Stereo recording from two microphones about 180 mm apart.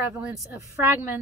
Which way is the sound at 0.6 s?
15° right (ahead or behind).